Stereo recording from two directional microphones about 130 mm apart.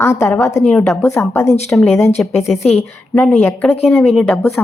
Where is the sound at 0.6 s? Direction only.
10° left (ahead or behind).